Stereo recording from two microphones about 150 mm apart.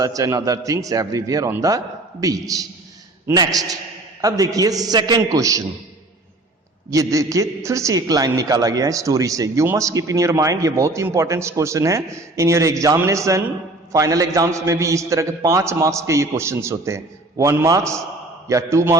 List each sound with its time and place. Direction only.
0.0 s a man's voice: 25° right (ahead or behind)
6.9 s a man's voice: 20° right (ahead or behind)